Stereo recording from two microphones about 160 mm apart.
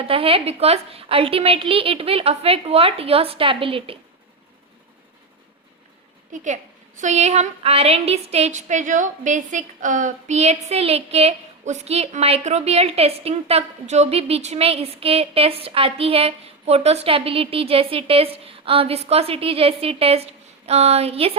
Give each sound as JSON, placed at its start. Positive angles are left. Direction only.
{"t": 0.0, "sound": "a woman's voice", "side_deg": -35}
{"t": 6.3, "sound": "a woman's voice", "side_deg": -50}